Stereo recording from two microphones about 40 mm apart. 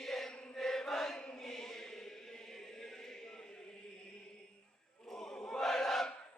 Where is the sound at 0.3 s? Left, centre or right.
Centre.